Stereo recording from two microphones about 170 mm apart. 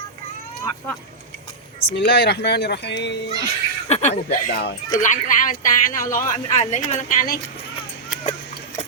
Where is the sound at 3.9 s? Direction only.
40° left (ahead or behind).